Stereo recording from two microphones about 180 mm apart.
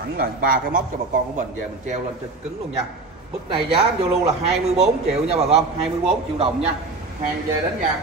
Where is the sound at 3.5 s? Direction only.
30° right (ahead or behind).